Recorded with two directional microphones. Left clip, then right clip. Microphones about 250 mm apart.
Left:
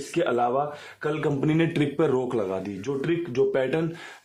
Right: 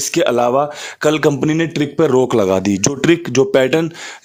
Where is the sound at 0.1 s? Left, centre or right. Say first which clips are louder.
Right 9 dB; right.